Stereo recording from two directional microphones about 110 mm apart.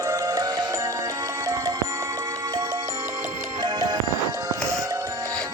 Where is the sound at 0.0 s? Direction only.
30° right (ahead or behind).